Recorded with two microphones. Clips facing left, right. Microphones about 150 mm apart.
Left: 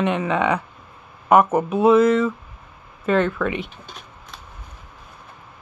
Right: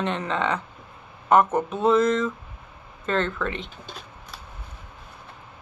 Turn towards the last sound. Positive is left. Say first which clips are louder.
# left 5 dB
turn(degrees=10)  # may be behind; listen again after turning